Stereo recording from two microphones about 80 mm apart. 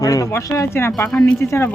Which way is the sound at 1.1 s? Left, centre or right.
Centre.